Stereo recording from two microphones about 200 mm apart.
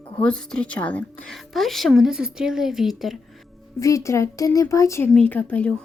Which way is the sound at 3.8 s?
15° left (ahead or behind).